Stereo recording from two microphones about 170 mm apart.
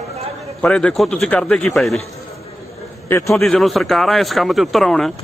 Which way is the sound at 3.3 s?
Centre (ahead or behind).